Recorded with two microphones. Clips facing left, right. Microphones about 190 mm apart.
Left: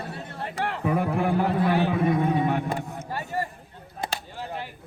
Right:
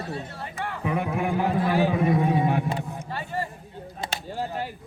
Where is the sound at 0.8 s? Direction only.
40° left (ahead or behind).